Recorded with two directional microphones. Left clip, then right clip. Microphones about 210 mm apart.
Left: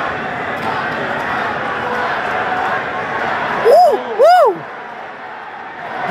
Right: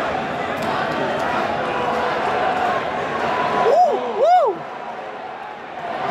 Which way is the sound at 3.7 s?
20° left (ahead or behind).